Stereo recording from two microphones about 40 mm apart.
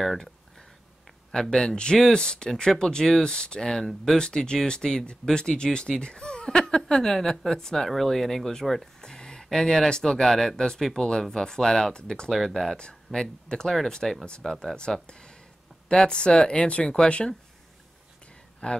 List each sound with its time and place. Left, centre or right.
1.3 s speech: centre
4.2 s speech: centre
12.3 s speech: centre
12.7 s speech: left
15.0 s speech: left
18.6 s speech: left